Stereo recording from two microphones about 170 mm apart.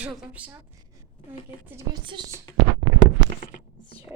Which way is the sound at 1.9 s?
25° right (ahead or behind).